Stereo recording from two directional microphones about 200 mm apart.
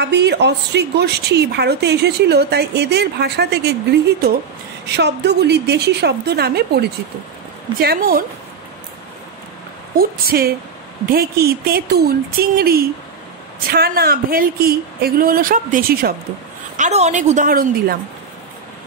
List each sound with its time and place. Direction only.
0.0 s speech: 55° right (ahead or behind)
4.8 s speech: 55° right (ahead or behind)
9.9 s speech: 50° right (ahead or behind)
16.7 s a woman's voice: 35° right (ahead or behind)